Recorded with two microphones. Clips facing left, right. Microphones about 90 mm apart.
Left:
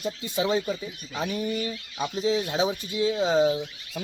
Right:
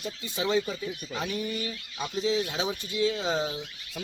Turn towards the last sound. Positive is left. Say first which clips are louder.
# left 7 dB
turn(degrees=15)  # may be behind; listen again after turning